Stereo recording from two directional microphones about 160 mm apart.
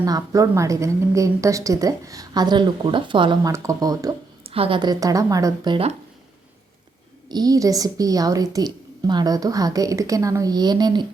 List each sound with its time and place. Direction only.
0.0 s a woman's voice: 20° right (ahead or behind)
3.5 s a woman's voice: 20° right (ahead or behind)
4.4 s a woman's voice: 35° right (ahead or behind)
5.7 s speech: 40° right (ahead or behind)
7.3 s a woman's voice: 25° right (ahead or behind)